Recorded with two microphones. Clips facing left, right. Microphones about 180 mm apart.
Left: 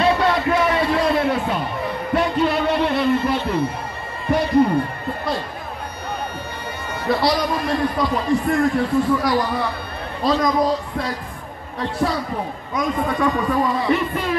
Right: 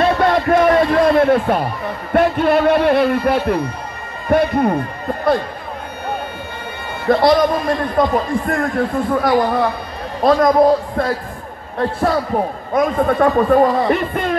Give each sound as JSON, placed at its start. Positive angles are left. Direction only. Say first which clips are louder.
{"t": 0.0, "sound": "a sound", "louder": "right 3 dB", "side_deg": -50}
{"t": 2.1, "sound": "a man's voice", "louder": "right 6 dB", "side_deg": -55}
{"t": 7.1, "sound": "a man's voice", "louder": "right 7 dB", "side_deg": -50}